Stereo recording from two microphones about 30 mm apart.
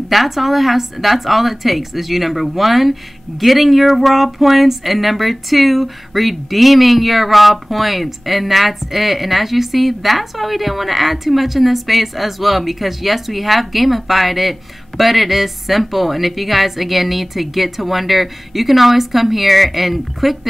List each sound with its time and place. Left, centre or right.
0.1 s a woman's voice: centre